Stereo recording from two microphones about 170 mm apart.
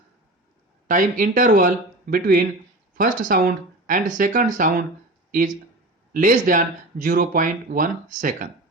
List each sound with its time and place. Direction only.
0.9 s speech: 50° right (ahead or behind)
6.1 s speech: 50° right (ahead or behind)